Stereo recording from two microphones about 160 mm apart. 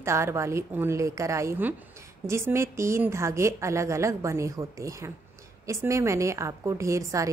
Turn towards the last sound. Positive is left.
turn(degrees=-20)  # may be behind; listen again after turning